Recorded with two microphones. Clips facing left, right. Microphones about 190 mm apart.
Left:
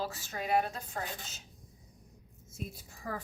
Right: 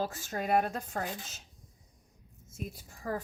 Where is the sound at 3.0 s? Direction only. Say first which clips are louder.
Right 4 dB; 45° right (ahead or behind).